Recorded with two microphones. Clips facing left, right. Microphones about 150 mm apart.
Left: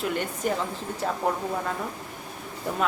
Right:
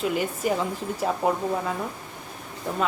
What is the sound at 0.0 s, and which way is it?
A woman's voice, 5° right (ahead or behind).